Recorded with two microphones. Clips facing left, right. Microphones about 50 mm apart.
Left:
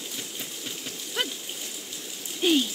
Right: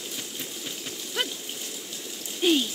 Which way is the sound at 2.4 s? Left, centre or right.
Centre.